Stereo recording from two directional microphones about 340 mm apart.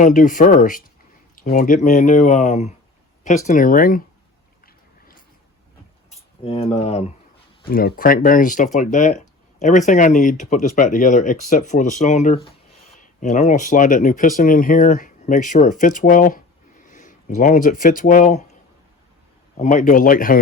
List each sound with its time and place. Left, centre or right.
0.0 s speech: left
6.1 s speech: centre
19.5 s speech: left